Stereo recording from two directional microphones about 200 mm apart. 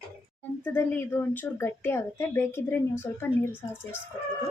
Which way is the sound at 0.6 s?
10° left (ahead or behind).